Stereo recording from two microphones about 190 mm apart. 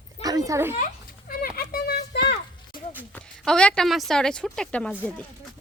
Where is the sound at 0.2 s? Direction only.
20° right (ahead or behind).